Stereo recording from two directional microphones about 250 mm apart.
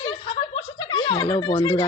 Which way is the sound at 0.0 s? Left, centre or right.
Left.